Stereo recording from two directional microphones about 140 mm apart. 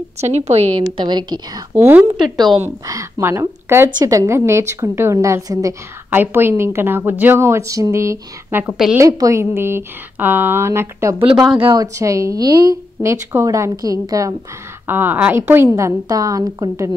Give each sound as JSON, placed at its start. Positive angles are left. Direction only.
{"t": 0.2, "sound": "a woman's voice", "side_deg": -50}
{"t": 0.7, "sound": "a woman's voice", "side_deg": -35}
{"t": 11.5, "sound": "a woman's voice", "side_deg": -30}
{"t": 14.9, "sound": "a woman's voice", "side_deg": -15}